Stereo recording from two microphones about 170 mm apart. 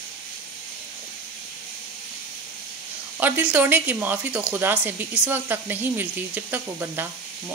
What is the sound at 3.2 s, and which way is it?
Speech, 10° right (ahead or behind).